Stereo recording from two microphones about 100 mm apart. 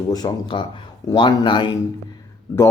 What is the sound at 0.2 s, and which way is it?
A man's voice, 45° left (ahead or behind).